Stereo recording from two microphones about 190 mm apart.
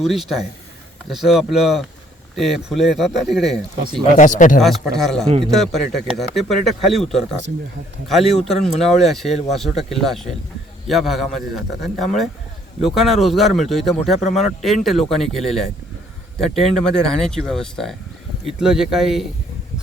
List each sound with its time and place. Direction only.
0.0 s speech: centre (ahead or behind)
4.2 s speech: 40° left (ahead or behind)
4.9 s speech: centre (ahead or behind)